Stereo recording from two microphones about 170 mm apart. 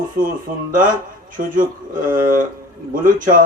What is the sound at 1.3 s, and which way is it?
Speech, 55° right (ahead or behind).